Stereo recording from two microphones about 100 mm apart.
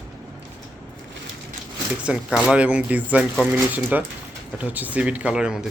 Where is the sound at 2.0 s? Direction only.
5° right (ahead or behind).